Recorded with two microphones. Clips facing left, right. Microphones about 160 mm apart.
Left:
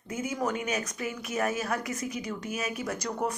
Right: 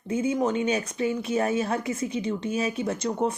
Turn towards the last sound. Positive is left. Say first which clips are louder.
# right 5 dB
turn(degrees=-25)  # may be behind; listen again after turning